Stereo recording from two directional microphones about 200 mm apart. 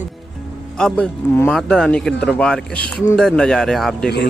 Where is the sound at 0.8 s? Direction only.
5° left (ahead or behind).